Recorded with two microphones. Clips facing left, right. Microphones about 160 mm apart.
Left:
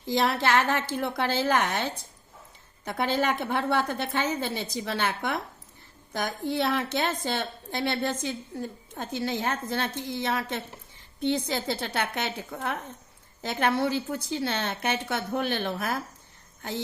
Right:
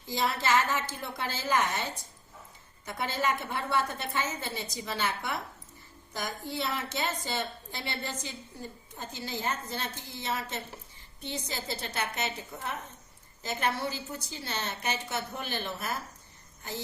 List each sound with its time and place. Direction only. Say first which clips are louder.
0.1 s a woman's voice: left 4 dB; 75° left (ahead or behind)
2.8 s a woman's voice: left 5 dB; 70° left (ahead or behind)